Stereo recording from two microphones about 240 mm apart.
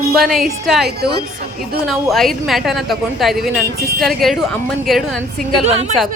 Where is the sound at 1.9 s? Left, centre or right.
Centre.